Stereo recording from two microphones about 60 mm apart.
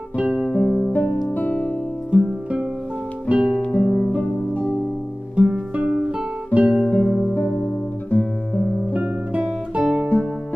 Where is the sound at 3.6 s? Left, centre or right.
Left.